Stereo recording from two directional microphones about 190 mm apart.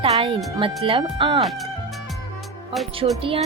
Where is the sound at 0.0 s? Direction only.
30° right (ahead or behind).